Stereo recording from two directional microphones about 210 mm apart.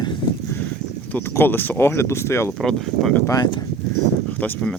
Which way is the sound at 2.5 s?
Centre (ahead or behind).